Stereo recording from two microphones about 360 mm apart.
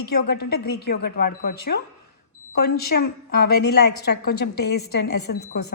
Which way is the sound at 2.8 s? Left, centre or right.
Left.